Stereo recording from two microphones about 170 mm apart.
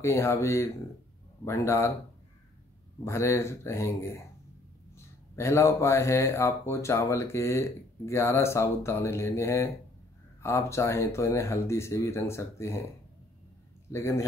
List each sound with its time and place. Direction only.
0.0 s speech: 15° left (ahead or behind)
3.0 s speech: 15° left (ahead or behind)
13.9 s speech: 15° left (ahead or behind)